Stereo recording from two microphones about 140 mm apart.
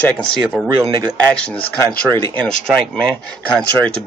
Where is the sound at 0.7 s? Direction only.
30° right (ahead or behind).